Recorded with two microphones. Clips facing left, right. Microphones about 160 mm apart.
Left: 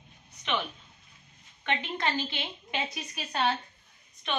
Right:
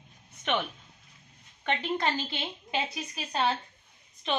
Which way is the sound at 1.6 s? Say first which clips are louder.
Right 2 dB; 35° right (ahead or behind).